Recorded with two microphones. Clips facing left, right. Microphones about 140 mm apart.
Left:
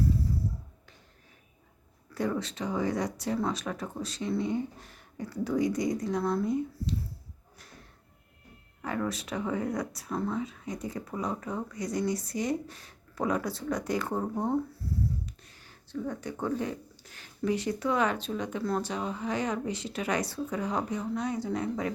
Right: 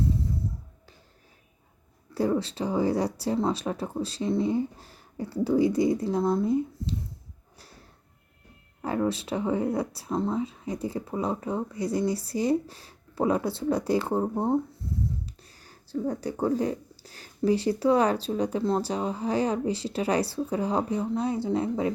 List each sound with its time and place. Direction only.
2.1 s speech: 30° right (ahead or behind)
8.8 s speech: 30° right (ahead or behind)
14.8 s dog: 20° right (ahead or behind)
15.4 s speech: 35° right (ahead or behind)